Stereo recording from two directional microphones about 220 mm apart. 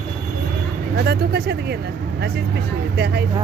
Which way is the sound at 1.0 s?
45° right (ahead or behind).